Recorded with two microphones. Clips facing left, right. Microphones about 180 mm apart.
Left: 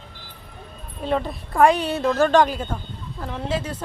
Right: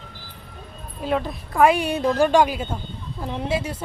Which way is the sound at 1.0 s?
Centre (ahead or behind).